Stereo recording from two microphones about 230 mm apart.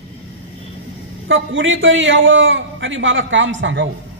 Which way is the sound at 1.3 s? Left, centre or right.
Right.